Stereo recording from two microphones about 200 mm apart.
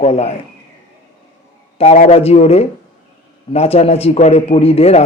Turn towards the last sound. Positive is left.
turn(degrees=30)  # may be behind; listen again after turning